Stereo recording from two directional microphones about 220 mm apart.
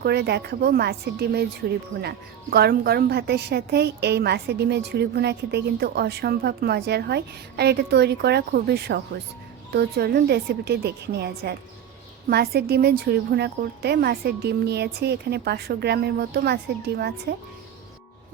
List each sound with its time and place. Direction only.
0.0 s speech: 50° right (ahead or behind)